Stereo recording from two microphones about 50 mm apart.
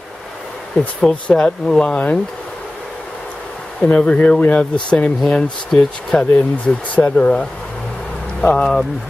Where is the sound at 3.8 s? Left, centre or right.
Left.